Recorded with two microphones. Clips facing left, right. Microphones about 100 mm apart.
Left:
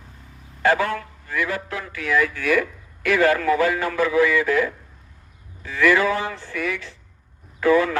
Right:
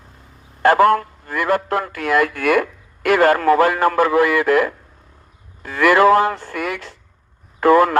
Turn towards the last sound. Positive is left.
turn(degrees=-55)  # may be behind; listen again after turning